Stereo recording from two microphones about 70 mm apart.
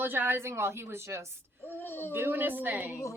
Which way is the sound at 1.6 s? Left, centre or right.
Left.